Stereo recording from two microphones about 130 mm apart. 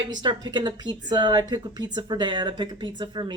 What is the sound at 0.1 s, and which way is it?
A woman's voice, 35° right (ahead or behind).